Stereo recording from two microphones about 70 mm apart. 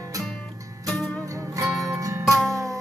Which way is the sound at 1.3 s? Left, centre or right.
Right.